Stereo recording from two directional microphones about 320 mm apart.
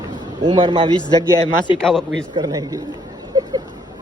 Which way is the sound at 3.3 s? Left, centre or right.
Centre.